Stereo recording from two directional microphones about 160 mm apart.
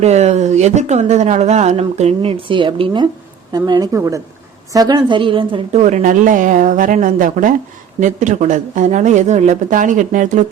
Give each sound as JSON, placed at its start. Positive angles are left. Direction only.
{"t": 0.0, "sound": "a woman's voice", "side_deg": -45}
{"t": 5.8, "sound": "a woman's voice", "side_deg": -50}